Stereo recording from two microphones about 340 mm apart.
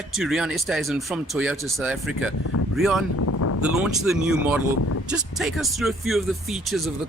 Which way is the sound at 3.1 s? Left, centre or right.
Left.